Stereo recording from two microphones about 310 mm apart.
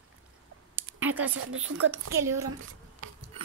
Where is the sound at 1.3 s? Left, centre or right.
Right.